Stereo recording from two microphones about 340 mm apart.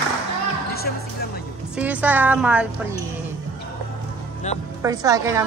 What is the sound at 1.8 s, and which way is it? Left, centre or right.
Speech, centre.